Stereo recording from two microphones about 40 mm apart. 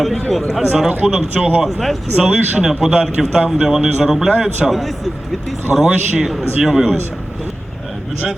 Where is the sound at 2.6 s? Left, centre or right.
Centre.